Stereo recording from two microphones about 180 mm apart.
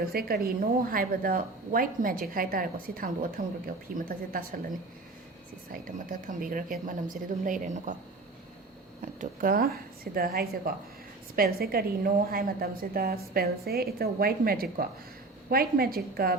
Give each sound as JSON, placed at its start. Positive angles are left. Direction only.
{"t": 0.0, "sound": "speech", "side_deg": -55}
{"t": 6.1, "sound": "speech", "side_deg": -50}
{"t": 9.0, "sound": "a woman's voice", "side_deg": -50}